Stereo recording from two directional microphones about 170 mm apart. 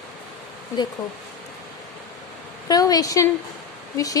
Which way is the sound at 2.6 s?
20° left (ahead or behind).